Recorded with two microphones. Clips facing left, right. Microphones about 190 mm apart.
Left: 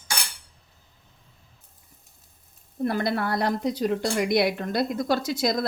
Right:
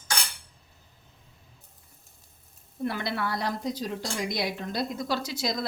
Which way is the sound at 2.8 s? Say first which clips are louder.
Left 5 dB; 45° left (ahead or behind).